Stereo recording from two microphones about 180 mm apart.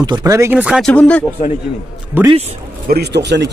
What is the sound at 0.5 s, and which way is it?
Speech, 5° right (ahead or behind).